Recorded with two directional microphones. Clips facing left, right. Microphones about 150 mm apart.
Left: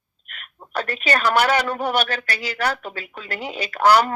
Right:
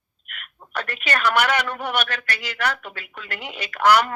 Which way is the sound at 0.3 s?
35° left (ahead or behind).